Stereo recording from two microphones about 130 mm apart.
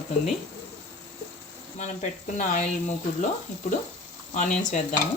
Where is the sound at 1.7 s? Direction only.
70° left (ahead or behind).